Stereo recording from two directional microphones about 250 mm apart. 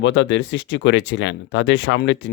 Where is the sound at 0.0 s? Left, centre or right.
Left.